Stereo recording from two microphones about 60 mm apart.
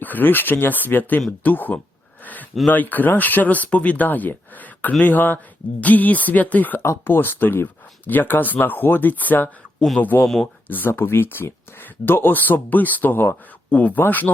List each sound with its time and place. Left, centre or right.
0.0 s speech: left
2.2 s a sound: left
2.6 s speech: left
6.8 s speech: left
10.2 s speech: centre
10.7 s speech: left
13.7 s speech: left